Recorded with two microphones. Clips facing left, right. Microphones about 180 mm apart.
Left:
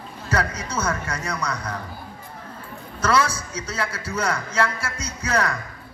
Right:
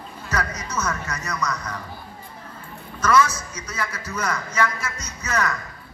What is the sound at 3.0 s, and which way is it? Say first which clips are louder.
A man's voice: right 2 dB; 30° left (ahead or behind).